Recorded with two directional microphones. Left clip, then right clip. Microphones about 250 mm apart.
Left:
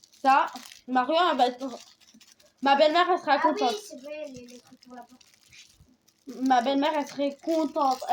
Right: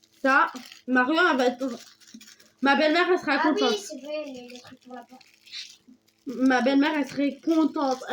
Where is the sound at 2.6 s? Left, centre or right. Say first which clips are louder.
Left 1 dB; centre.